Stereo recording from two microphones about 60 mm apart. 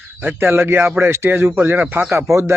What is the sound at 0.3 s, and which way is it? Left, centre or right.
A man's voice, right.